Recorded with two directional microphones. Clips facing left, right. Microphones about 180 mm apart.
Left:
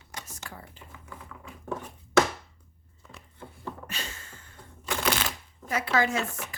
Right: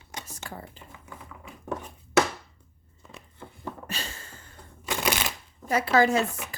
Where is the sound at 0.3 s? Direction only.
30° right (ahead or behind).